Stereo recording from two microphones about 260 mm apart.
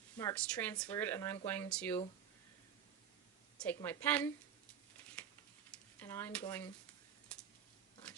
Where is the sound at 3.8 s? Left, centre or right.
Centre.